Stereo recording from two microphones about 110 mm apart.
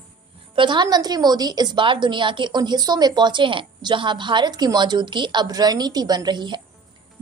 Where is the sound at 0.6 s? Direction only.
45° right (ahead or behind).